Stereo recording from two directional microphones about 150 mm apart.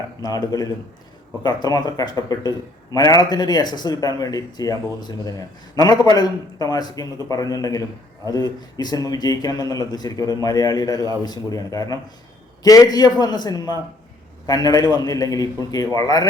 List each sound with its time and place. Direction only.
0.2 s speech: 25° left (ahead or behind)